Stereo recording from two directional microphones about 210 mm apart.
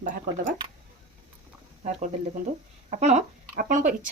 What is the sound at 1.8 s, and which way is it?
Speech, 35° right (ahead or behind).